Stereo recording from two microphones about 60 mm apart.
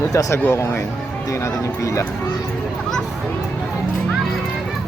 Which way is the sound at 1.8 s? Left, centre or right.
Left.